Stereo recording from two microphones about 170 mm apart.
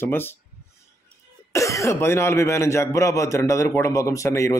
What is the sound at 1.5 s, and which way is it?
Speech, 20° left (ahead or behind).